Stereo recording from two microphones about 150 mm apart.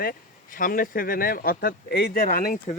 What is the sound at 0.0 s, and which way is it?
Speech, 70° left (ahead or behind).